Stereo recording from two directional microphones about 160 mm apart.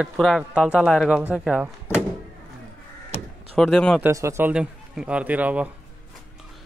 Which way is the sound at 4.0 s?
20° right (ahead or behind).